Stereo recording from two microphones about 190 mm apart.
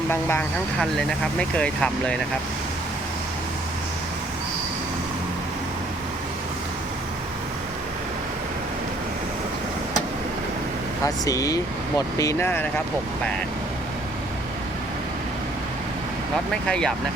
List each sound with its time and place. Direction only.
0.1 s speech: 10° left (ahead or behind)
11.0 s speech: 15° left (ahead or behind)
16.6 s speech: 5° left (ahead or behind)